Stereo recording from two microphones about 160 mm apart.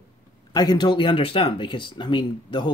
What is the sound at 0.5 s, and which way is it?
Speech, 25° left (ahead or behind).